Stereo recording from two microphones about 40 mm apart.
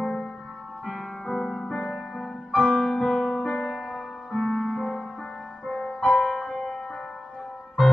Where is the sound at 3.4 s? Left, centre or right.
Left.